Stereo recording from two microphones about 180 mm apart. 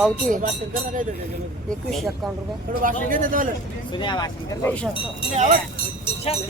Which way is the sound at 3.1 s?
50° right (ahead or behind).